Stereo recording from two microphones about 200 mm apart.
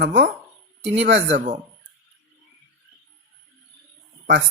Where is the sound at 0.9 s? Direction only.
65° right (ahead or behind).